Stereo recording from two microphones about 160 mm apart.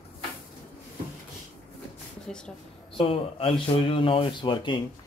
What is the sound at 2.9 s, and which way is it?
Speech, 35° left (ahead or behind).